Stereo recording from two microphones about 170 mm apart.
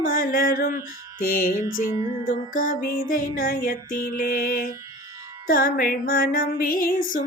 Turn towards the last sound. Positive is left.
turn(degrees=55)  # may be behind; listen again after turning